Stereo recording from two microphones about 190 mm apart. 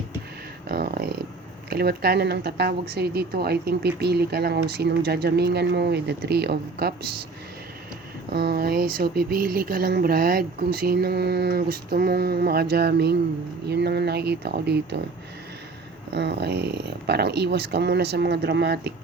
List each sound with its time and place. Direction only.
0.7 s a sound: 55° right (ahead or behind)
1.7 s a woman's voice: 55° right (ahead or behind)
8.3 s a woman's voice: 55° right (ahead or behind)
16.1 s a woman's voice: 60° right (ahead or behind)